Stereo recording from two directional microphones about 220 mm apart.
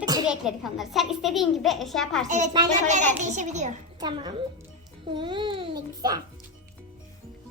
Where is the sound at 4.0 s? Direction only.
20° right (ahead or behind).